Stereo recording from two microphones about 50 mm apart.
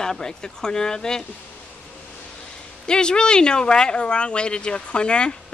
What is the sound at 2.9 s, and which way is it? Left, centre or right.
Speech, centre.